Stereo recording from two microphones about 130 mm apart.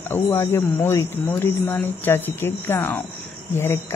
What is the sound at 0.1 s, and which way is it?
Speech, 20° left (ahead or behind).